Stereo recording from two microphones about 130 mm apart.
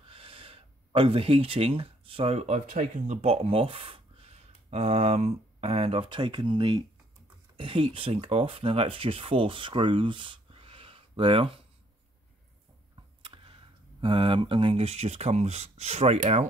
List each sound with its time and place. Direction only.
0.0 s speech: 45° right (ahead or behind)
13.2 s a sound: 40° right (ahead or behind)
14.0 s speech: 40° right (ahead or behind)